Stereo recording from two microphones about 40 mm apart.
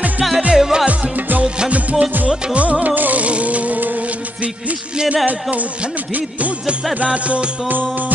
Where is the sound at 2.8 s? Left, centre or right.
Right.